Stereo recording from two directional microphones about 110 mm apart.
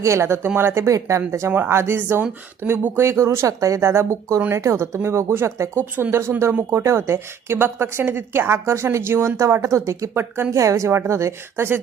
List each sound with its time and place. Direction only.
0.0 s speech: 25° right (ahead or behind)